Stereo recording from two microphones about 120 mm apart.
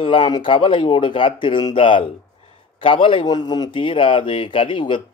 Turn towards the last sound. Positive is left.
turn(degrees=45)  # may be behind; listen again after turning